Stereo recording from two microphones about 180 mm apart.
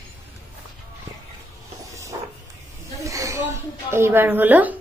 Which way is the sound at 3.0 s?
15° right (ahead or behind).